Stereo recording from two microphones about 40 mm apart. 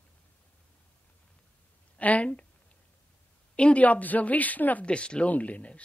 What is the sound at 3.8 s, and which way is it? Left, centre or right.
A woman's voice, left.